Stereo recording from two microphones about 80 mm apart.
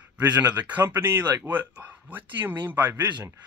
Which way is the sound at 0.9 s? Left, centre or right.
Right.